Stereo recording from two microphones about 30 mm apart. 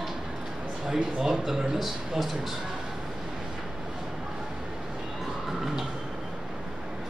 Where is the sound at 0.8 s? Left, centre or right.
Centre.